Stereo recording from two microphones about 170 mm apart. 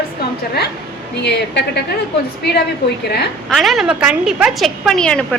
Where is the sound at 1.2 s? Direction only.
85° left.